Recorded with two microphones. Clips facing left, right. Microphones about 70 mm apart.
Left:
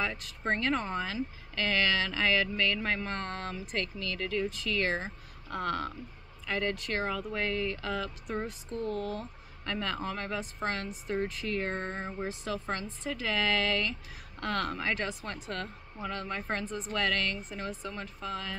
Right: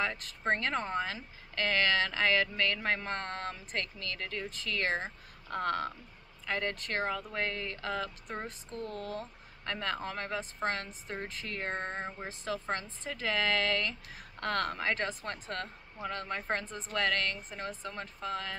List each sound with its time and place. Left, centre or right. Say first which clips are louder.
0.0 s a woman's voice: even; right